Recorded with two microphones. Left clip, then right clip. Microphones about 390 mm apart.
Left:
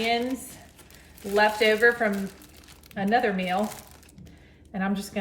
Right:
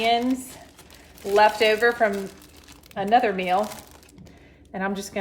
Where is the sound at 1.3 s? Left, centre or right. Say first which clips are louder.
Right 3 dB; centre.